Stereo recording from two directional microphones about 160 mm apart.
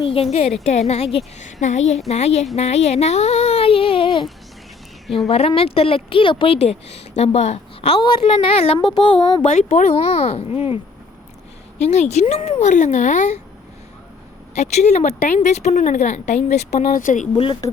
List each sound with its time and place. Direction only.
0.0 s a woman's voice: 35° left (ahead or behind)
5.0 s a woman's voice: centre (ahead or behind)
5.3 s a woman's voice: 40° left (ahead or behind)
6.8 s speech: 90° left
7.2 s a woman's voice: 40° left (ahead or behind)
11.8 s speech: 45° left (ahead or behind)
14.5 s speech: 45° left (ahead or behind)
17.3 s a woman's voice: 35° left (ahead or behind)